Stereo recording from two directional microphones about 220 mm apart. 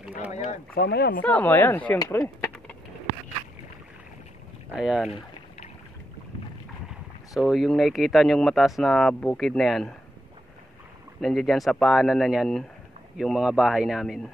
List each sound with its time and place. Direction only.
0.7 s speech: 45° left (ahead or behind)
1.2 s speech: 5° left (ahead or behind)
4.7 s speech: 5° right (ahead or behind)
7.3 s speech: centre (ahead or behind)
11.1 s speech: centre (ahead or behind)